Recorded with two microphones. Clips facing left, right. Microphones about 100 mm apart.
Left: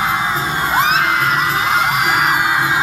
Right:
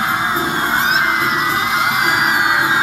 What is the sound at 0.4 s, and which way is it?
Music, 15° right (ahead or behind).